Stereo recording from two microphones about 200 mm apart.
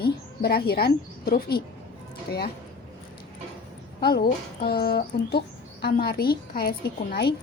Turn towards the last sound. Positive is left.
turn(degrees=55)  # may be behind; listen again after turning